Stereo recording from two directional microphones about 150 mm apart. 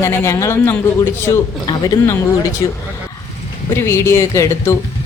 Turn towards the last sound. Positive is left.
turn(degrees=20)  # may be behind; listen again after turning